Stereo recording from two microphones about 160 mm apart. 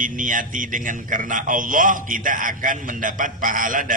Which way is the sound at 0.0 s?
55° right (ahead or behind).